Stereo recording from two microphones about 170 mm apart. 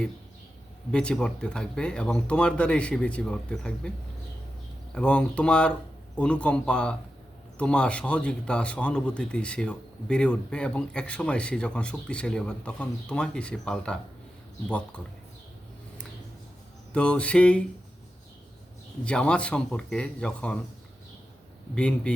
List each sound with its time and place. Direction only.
0.9 s speech: 5° left (ahead or behind)
4.9 s a man's voice: 5° left (ahead or behind)
16.9 s a man's voice: 5° left (ahead or behind)
19.0 s speech: 5° left (ahead or behind)
21.8 s a man's voice: 5° left (ahead or behind)